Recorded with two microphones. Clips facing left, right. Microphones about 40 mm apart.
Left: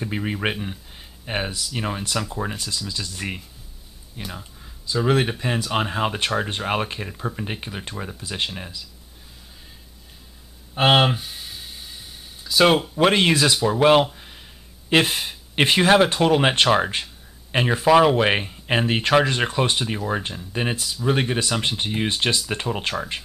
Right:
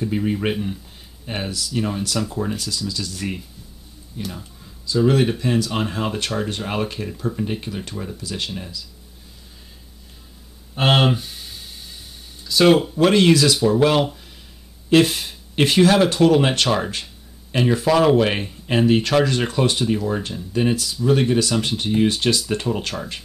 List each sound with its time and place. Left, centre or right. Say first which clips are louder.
0.0 s speech: right 3 dB; left
4.2 s a sound: right 3 dB; centre
5.0 s speech: right 3 dB; left
10.8 s a sound: even; centre
12.4 s speech: right 2 dB; centre
12.9 s speech: right 3 dB; left